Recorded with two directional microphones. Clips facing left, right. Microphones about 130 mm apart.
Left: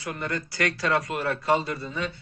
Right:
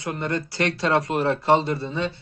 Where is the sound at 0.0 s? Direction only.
25° right (ahead or behind).